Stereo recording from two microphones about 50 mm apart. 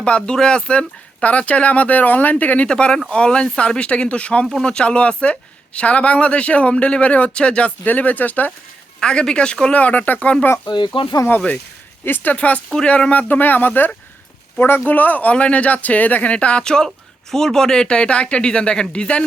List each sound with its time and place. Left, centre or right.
0.2 s speech: centre; by 2.6 s left
2.6 s speech: centre
7.9 s speech: left
9.0 s speech: centre
9.7 s speech: left
12.0 s speech: left
12.7 s speech: centre